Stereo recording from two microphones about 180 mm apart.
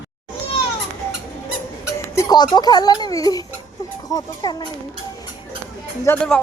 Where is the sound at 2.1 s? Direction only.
20° left (ahead or behind).